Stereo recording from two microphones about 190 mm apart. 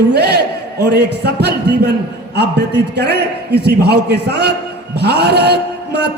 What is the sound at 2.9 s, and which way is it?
A man's voice, 60° right (ahead or behind).